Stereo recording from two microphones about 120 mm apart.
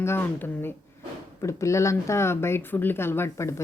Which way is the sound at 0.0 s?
20° left (ahead or behind).